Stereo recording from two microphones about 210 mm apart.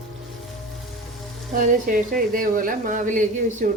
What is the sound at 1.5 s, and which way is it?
A woman's voice, 40° right (ahead or behind).